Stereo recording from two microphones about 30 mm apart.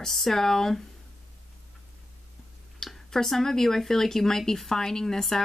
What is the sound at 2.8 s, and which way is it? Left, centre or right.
Speech, centre.